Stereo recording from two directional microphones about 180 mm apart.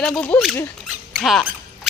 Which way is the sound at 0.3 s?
15° left (ahead or behind).